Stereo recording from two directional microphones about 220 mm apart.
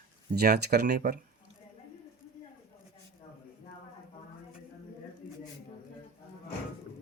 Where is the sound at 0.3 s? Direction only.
45° right (ahead or behind).